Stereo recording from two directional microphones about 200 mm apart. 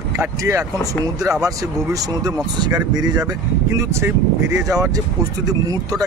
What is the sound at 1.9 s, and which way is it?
Speech, 20° right (ahead or behind).